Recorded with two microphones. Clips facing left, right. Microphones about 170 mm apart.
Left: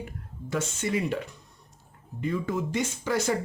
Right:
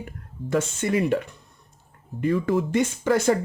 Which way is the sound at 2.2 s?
65° right (ahead or behind).